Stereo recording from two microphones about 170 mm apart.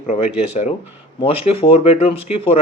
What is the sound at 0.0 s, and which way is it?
Speech, 40° left (ahead or behind).